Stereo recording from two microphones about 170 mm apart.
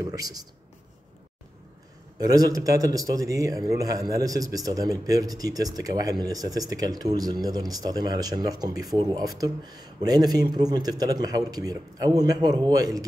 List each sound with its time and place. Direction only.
0.0 s speech: 20° right (ahead or behind)
2.1 s a man's voice: 20° right (ahead or behind)